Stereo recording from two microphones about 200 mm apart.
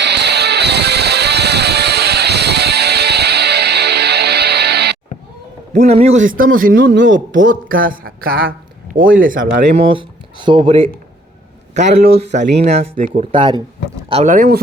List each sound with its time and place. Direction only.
0.0 s music: 55° right (ahead or behind)
5.7 s a man's voice: 35° right (ahead or behind)
6.7 s speech: 60° right (ahead or behind)
7.7 s speech: 45° right (ahead or behind)
9.7 s a man's voice: 25° right (ahead or behind)
12.0 s speech: 55° right (ahead or behind)
12.6 s a man's voice: 35° right (ahead or behind)